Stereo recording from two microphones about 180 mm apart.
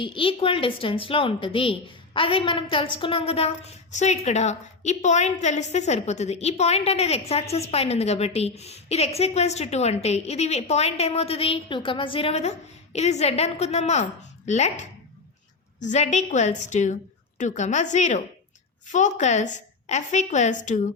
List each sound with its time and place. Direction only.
0.0 s a woman's voice: 30° left (ahead or behind); by 20.8 s 45° left (ahead or behind)